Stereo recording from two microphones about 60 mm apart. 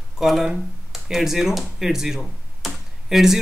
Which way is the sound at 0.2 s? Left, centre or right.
Centre.